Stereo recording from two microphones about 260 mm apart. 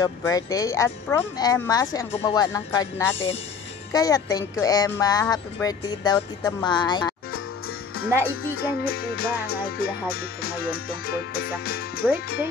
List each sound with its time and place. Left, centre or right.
0.0 s speech: centre
8.9 s music: left
12.0 s speech: centre